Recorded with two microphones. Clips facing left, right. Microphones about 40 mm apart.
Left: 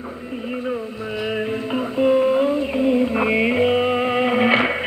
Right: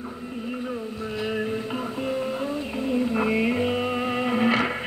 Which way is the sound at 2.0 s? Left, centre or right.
Left.